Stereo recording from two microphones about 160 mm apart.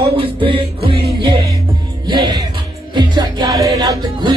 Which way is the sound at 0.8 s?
35° right (ahead or behind).